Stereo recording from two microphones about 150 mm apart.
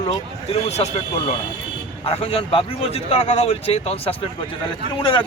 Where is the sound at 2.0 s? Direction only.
40° left (ahead or behind).